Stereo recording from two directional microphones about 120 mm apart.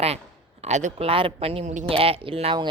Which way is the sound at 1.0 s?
50° right (ahead or behind).